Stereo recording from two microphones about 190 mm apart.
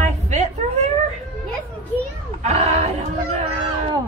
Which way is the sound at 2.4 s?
35° right (ahead or behind).